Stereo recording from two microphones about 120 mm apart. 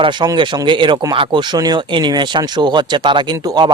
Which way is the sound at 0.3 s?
40° right (ahead or behind).